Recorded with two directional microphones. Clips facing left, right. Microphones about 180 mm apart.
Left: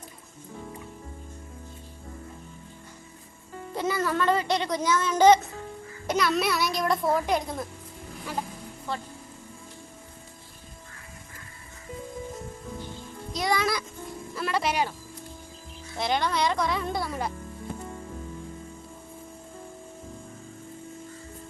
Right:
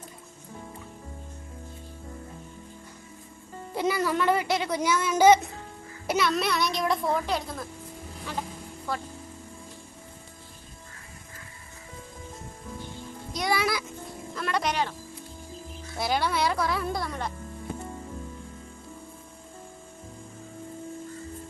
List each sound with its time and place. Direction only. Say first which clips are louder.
3.8 s a child's voice: right 1 dB; 15° right (ahead or behind)
7.3 s speech: left 3 dB; 15° left (ahead or behind)
13.3 s music: left 1 dB; centre (ahead or behind)
16.0 s music: even; 5° right (ahead or behind)